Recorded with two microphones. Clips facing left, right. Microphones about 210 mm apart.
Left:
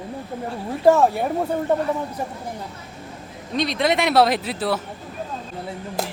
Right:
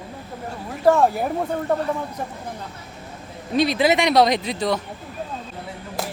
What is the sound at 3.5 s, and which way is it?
Speech, 5° right (ahead or behind).